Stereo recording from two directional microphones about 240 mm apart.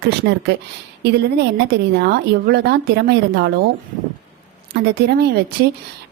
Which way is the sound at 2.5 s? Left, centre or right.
Right.